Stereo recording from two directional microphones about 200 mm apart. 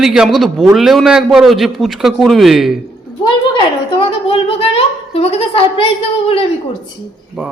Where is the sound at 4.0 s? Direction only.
30° left (ahead or behind).